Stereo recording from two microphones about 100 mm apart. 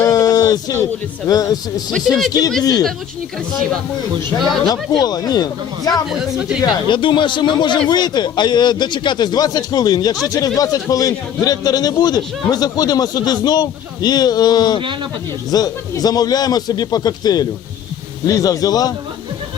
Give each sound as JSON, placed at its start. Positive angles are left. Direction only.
{"t": 0.1, "sound": "a sound", "side_deg": 40}
{"t": 1.3, "sound": "a man's voice", "side_deg": 35}
{"t": 1.9, "sound": "speech", "side_deg": 5}
{"t": 4.6, "sound": "a man's voice", "side_deg": 40}
{"t": 6.1, "sound": "speech", "side_deg": -10}
{"t": 6.6, "sound": "a man's voice", "side_deg": 55}